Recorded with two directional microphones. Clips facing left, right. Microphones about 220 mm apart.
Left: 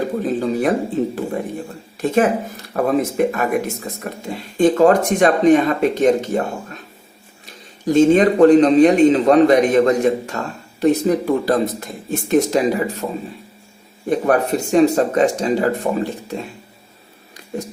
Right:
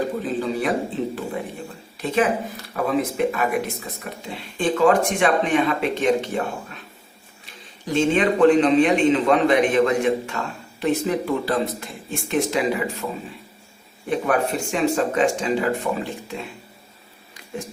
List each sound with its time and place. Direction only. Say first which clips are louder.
0.2 s a man's voice: left 5 dB; 45° left (ahead or behind)
7.9 s a man's voice: left 7 dB; 40° left (ahead or behind)
14.1 s a man's voice: left 5 dB; 40° left (ahead or behind)